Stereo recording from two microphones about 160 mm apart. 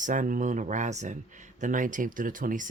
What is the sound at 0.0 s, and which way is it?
Speech, 55° right (ahead or behind).